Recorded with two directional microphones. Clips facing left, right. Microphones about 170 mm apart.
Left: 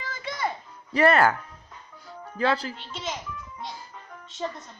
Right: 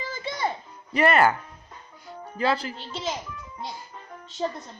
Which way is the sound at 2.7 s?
35° right (ahead or behind).